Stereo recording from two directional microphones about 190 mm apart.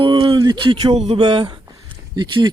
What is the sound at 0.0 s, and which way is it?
Speech, 25° right (ahead or behind).